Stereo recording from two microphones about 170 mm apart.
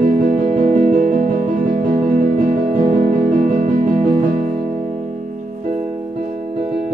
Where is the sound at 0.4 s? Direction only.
40° right (ahead or behind).